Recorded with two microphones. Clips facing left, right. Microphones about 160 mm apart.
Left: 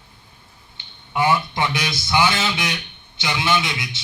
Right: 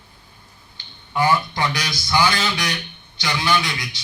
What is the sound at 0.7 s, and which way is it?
Speech, 20° left (ahead or behind).